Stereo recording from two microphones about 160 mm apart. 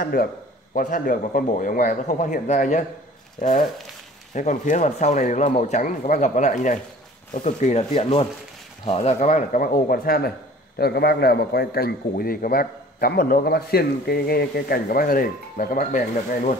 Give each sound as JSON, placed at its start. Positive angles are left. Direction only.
{"t": 0.0, "sound": "a man's voice", "side_deg": 70}
{"t": 10.8, "sound": "a man's voice", "side_deg": 90}